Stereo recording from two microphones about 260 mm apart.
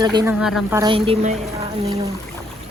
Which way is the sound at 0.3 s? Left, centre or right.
Centre.